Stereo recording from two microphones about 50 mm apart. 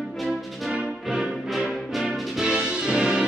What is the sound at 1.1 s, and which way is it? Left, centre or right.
Music, centre.